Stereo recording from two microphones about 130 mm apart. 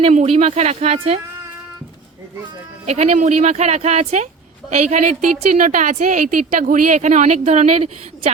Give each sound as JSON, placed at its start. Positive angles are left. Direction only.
{"t": 0.1, "sound": "speech", "side_deg": -65}
{"t": 2.8, "sound": "a woman's voice", "side_deg": -60}